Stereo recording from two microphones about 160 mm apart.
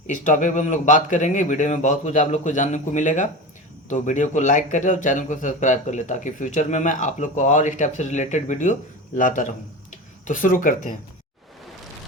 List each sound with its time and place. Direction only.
0.1 s a man's voice: 55° left (ahead or behind)